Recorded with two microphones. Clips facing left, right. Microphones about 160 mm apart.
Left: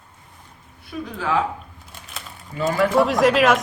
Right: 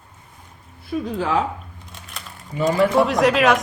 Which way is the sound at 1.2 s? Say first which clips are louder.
Even; 35° right (ahead or behind).